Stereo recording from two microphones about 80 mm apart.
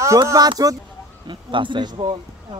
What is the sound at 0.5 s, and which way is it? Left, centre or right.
Speech, right.